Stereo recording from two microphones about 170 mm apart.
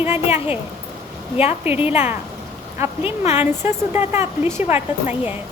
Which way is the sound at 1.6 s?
10° right (ahead or behind).